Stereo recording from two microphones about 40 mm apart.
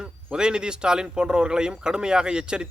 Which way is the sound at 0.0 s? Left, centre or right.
Right.